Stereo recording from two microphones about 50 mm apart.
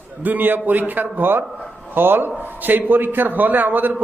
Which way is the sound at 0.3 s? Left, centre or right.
Right.